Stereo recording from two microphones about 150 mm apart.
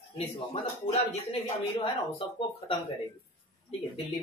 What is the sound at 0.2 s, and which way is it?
Speech, 40° left (ahead or behind).